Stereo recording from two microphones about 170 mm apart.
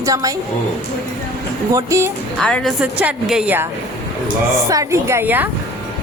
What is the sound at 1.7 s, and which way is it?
Speech, 15° right (ahead or behind).